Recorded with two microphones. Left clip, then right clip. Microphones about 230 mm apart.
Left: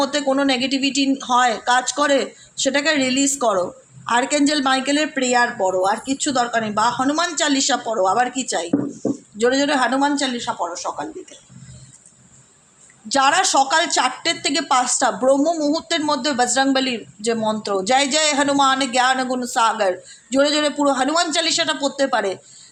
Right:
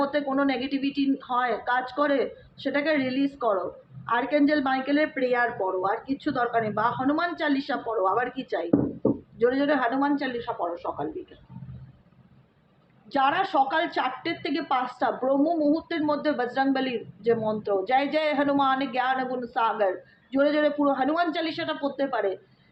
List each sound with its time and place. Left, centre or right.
0.0 s a woman's voice: left
13.1 s a woman's voice: left